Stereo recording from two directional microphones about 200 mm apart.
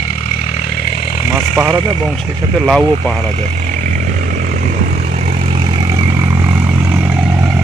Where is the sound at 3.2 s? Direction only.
35° right (ahead or behind).